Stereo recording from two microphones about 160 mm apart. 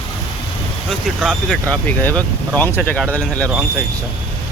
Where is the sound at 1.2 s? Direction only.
Centre (ahead or behind).